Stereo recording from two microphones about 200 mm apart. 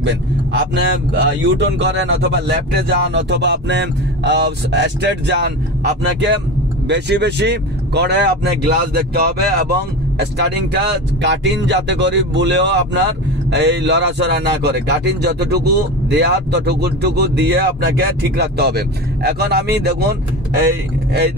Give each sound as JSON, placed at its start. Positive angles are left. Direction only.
{"t": 0.0, "sound": "a man's voice", "side_deg": -60}